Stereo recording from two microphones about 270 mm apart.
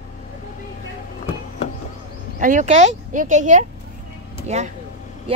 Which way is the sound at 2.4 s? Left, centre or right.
Right.